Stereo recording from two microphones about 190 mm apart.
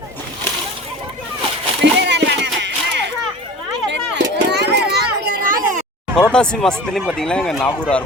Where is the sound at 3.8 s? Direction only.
70° right (ahead or behind).